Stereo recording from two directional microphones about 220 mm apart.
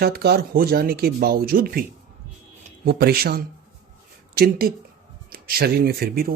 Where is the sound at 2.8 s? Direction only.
45° right (ahead or behind).